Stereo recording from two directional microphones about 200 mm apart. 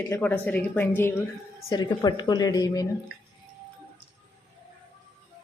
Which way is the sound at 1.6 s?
20° left (ahead or behind).